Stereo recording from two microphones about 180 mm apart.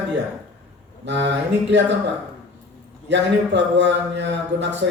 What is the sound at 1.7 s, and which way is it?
Speech, 80° right.